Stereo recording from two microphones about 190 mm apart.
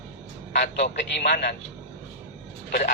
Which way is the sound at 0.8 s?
40° left (ahead or behind).